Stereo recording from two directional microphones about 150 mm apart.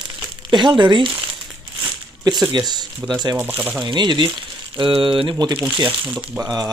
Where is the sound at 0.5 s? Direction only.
30° right (ahead or behind).